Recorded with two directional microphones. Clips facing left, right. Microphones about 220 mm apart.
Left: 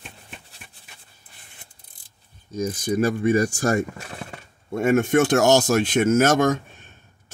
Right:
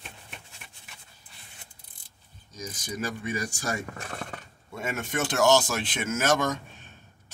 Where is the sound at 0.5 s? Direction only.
35° left (ahead or behind).